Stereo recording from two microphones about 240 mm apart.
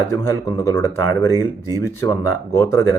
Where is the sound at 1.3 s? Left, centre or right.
Centre.